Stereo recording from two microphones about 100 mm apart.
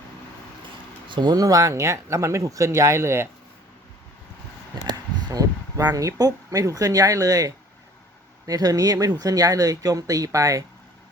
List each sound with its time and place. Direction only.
1.0 s speech: 50° right (ahead or behind); by 3.2 s 25° right (ahead or behind)
4.7 s speech: 40° right (ahead or behind)